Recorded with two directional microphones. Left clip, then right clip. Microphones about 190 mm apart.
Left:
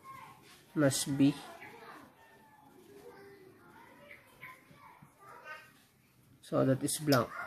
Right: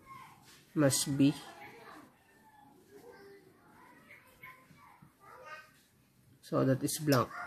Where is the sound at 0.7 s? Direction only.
25° right (ahead or behind).